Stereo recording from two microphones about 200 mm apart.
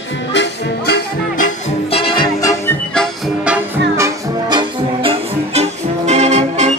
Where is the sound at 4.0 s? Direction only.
20° right (ahead or behind).